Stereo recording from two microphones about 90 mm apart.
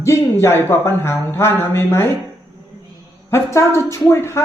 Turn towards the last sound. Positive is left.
turn(degrees=30)  # may be behind; listen again after turning